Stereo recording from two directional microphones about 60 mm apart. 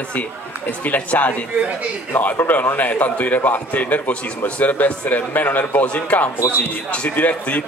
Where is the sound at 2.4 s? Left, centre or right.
Left.